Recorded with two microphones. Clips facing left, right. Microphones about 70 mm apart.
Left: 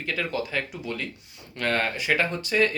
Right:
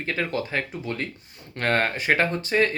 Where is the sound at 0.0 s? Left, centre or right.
Right.